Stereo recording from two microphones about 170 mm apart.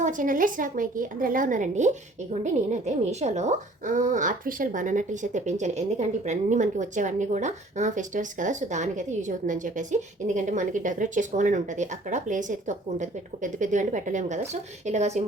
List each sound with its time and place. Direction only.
0.0 s a woman's voice: 50° right (ahead or behind)